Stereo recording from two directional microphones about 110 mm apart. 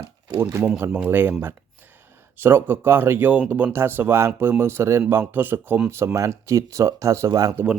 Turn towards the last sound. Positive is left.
turn(degrees=-25)  # may be behind; listen again after turning